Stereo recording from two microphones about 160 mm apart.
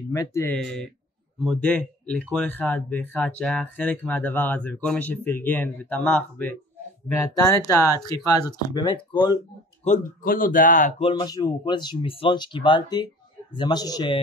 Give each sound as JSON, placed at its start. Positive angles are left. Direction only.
{"t": 0.1, "sound": "speech", "side_deg": 20}
{"t": 0.6, "sound": "speech", "side_deg": 5}
{"t": 7.1, "sound": "speech", "side_deg": 20}
{"t": 9.8, "sound": "speech", "side_deg": 55}
{"t": 11.0, "sound": "speech", "side_deg": 30}